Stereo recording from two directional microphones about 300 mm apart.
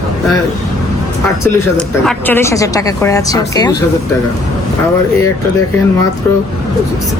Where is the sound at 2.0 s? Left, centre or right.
Centre.